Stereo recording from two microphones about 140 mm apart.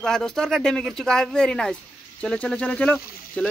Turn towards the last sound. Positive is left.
turn(degrees=10)  # may be behind; listen again after turning